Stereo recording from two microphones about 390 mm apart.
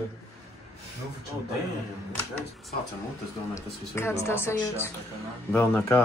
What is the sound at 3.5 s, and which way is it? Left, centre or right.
Speech, centre.